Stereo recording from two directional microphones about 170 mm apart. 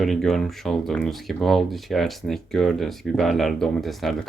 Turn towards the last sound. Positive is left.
turn(degrees=0)  # may be behind; listen again after turning